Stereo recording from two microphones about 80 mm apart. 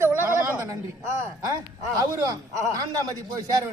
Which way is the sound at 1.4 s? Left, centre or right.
Right.